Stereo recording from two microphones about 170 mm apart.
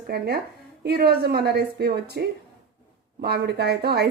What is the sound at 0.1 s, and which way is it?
A woman's voice, 65° right (ahead or behind).